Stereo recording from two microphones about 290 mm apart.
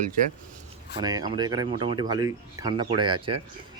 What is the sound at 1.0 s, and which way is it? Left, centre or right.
Speech, centre.